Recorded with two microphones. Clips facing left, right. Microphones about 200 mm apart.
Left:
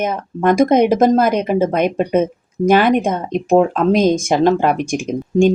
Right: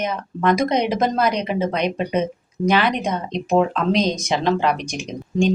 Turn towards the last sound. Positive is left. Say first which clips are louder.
# left 6 dB
turn(degrees=50)  # may be behind; listen again after turning